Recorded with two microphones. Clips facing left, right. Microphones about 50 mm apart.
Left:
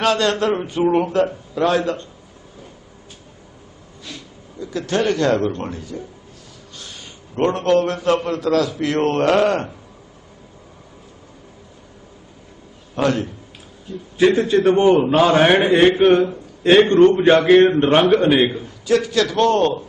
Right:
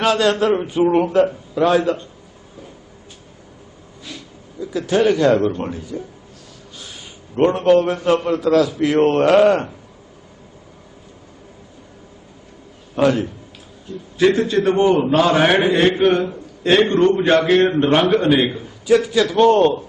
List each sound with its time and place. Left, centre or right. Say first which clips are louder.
0.0 s a man's voice: right 2 dB; centre
4.6 s a man's voice: right 3 dB; centre
7.3 s a man's voice: right 3 dB; centre
13.0 s a man's voice: right 3 dB; centre
18.9 s a man's voice: right 2 dB; centre